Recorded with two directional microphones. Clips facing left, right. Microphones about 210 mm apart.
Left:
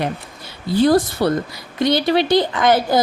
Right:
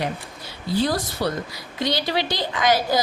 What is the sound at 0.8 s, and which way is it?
A woman's voice, 55° left (ahead or behind).